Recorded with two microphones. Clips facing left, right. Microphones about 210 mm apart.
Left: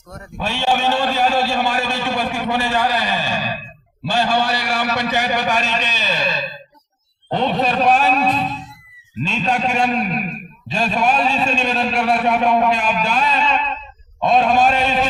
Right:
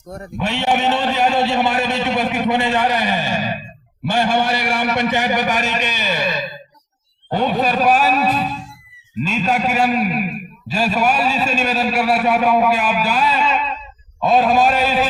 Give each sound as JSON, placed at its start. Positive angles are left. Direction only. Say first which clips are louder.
{"t": 0.3, "sound": "a man's voice", "louder": "right 1 dB", "side_deg": -20}